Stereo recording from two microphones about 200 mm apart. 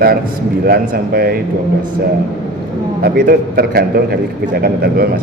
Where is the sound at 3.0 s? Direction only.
50° right (ahead or behind).